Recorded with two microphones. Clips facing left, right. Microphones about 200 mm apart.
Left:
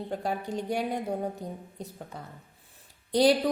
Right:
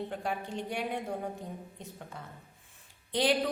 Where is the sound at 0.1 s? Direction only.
40° left (ahead or behind).